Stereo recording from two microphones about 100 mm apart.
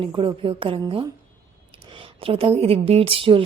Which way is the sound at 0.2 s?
60° right (ahead or behind).